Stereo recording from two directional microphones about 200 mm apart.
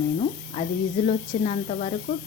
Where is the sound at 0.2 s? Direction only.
30° left (ahead or behind).